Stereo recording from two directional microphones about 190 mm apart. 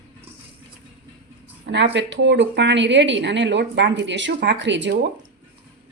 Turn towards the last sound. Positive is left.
turn(degrees=-70)  # may be behind; listen again after turning